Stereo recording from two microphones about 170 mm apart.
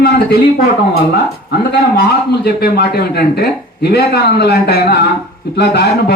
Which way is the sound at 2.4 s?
70° left (ahead or behind).